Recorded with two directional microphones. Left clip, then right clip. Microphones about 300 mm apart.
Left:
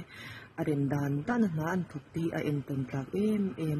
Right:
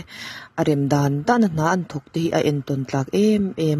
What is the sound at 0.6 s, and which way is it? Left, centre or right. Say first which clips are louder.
Speech: right 12 dB; right.